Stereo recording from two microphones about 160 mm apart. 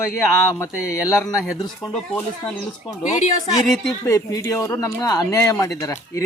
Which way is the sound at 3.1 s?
50° left (ahead or behind).